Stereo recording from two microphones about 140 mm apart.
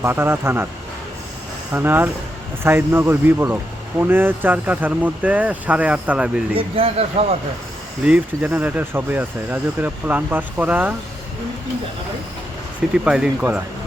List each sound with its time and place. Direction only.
0.0 s speech: 15° right (ahead or behind)
1.7 s speech: 15° right (ahead or behind)
6.6 s speech: 45° right (ahead or behind)
8.0 s speech: 10° right (ahead or behind)
13.1 s speech: 10° right (ahead or behind)